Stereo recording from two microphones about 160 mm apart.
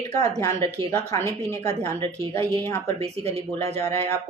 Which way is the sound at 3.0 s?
40° right (ahead or behind).